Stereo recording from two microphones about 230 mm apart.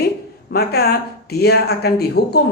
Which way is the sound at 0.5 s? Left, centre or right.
Left.